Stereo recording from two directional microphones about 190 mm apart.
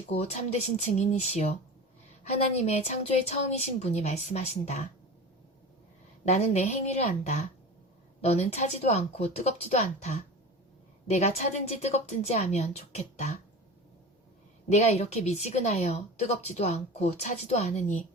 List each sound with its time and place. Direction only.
0.1 s speech: 35° left (ahead or behind)
6.2 s speech: 35° left (ahead or behind)
14.7 s speech: 35° left (ahead or behind)